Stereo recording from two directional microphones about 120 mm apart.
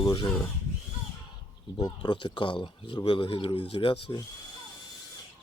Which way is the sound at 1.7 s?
35° left (ahead or behind).